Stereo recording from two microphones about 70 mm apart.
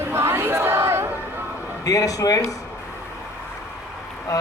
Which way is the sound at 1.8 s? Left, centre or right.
Left.